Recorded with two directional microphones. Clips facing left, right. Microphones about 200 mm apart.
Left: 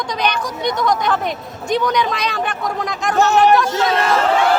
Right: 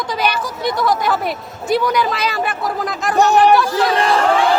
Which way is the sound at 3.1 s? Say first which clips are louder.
Right 2 dB; 15° right (ahead or behind).